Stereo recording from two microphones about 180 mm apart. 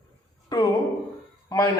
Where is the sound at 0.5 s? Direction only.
20° left (ahead or behind).